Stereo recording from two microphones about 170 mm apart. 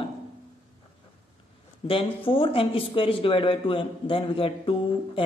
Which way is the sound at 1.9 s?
30° left (ahead or behind).